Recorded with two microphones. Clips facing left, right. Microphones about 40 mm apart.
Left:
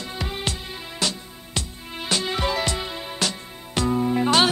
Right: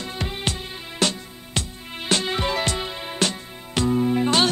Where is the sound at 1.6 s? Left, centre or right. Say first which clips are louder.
Right 1 dB; right.